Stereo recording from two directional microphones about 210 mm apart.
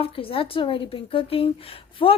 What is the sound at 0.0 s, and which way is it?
A woman's voice, 25° left (ahead or behind).